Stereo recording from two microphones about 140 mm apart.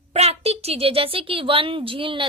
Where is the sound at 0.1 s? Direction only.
50° right (ahead or behind).